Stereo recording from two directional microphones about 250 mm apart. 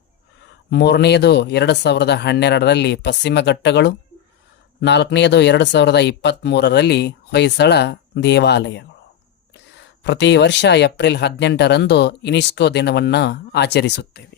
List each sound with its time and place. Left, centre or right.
0.7 s speech: left
10.0 s speech: left